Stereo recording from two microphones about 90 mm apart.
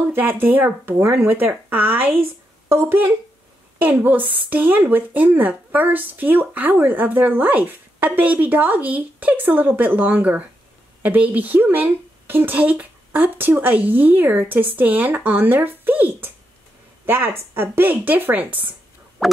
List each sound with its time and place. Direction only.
0.1 s speech: 25° right (ahead or behind)